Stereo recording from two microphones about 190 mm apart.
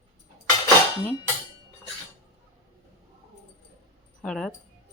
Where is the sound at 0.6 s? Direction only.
15° left (ahead or behind).